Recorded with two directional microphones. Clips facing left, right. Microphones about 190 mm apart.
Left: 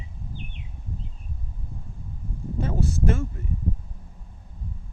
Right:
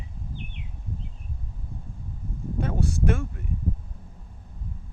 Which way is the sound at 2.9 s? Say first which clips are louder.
Even; 60° right (ahead or behind).